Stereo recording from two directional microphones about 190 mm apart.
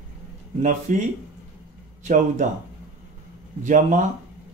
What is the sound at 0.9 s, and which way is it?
A man's voice, 40° right (ahead or behind).